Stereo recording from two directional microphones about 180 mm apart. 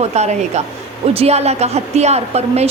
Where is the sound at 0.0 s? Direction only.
35° right (ahead or behind).